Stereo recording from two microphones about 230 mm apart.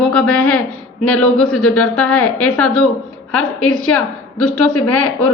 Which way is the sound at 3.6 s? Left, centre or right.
Left.